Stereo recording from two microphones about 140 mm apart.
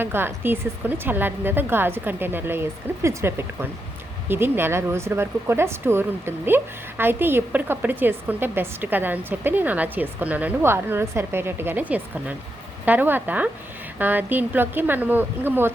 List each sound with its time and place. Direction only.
0.0 s speech: 15° right (ahead or behind)